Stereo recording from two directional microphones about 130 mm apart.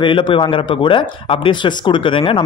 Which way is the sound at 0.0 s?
40° left (ahead or behind).